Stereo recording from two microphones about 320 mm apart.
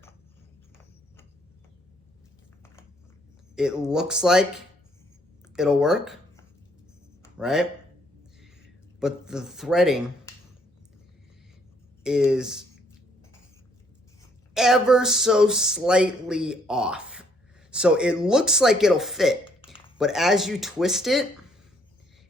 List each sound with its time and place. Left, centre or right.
3.5 s speech: centre
7.3 s speech: centre
8.4 s a sound: centre
12.0 s speech: centre
14.5 s speech: centre
19.5 s a sound: centre
20.0 s speech: centre